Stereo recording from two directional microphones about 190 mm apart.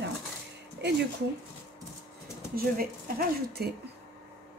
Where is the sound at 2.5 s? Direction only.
50° right (ahead or behind).